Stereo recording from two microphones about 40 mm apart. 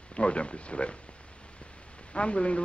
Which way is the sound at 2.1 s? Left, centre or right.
Left.